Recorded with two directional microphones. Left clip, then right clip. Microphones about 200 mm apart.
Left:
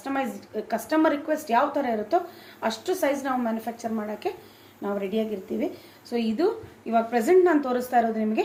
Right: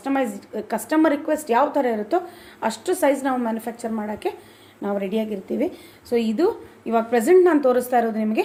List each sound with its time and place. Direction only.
0.0 s a woman's voice: 55° right (ahead or behind)